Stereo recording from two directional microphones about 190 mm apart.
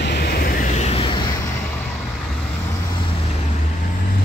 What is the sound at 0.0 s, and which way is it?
Vehicle, 60° left (ahead or behind).